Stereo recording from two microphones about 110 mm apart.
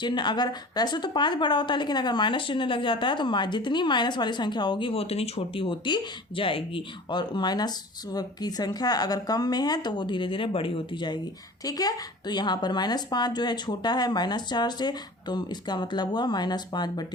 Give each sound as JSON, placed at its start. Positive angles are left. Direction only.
{"t": 0.0, "sound": "speech", "side_deg": 45}